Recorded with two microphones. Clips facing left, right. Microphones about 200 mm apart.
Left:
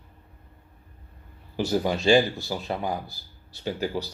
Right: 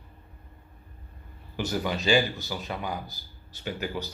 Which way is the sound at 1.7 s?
35° left (ahead or behind).